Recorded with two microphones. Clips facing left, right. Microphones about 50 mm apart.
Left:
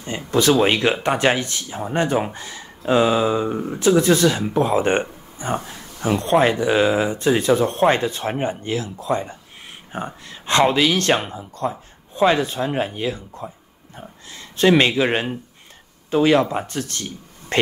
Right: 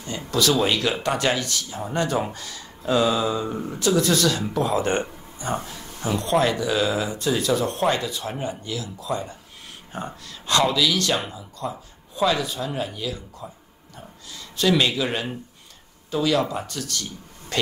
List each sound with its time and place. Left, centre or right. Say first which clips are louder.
0.3 s speech: left 5 dB; left
5.0 s a sound: left 3 dB; left
5.7 s speech: left 5 dB; left